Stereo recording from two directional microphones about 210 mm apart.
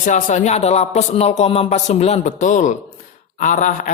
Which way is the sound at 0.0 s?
35° left (ahead or behind).